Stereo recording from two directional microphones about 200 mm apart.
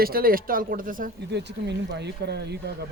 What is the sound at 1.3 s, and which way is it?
Speech, 60° right (ahead or behind).